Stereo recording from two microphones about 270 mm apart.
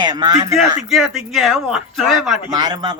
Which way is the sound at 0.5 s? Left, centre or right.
Centre.